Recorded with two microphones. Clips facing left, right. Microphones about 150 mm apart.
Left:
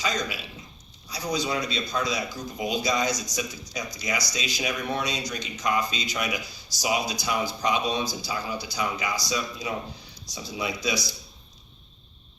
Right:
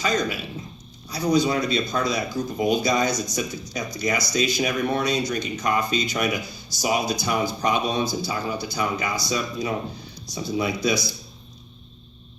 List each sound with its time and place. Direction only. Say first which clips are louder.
0.0 s speech: right 5 dB; 55° right (ahead or behind)